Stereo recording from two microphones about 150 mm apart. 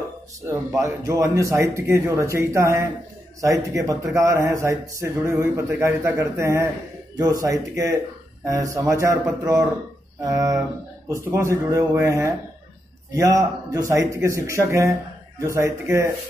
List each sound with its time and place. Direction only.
0.5 s speech: 20° right (ahead or behind)